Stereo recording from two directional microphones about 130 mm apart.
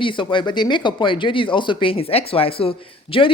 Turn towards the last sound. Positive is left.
turn(degrees=45)  # may be behind; listen again after turning